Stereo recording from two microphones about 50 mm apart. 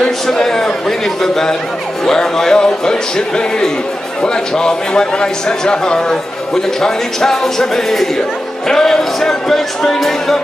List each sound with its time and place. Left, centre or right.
0.3 s speech: centre